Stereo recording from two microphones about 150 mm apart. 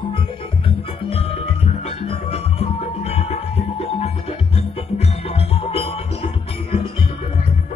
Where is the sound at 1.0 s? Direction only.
40° left (ahead or behind).